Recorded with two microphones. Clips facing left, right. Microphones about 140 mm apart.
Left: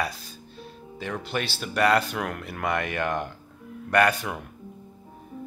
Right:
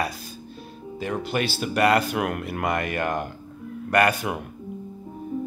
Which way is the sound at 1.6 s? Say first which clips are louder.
Right 1 dB; 5° right (ahead or behind).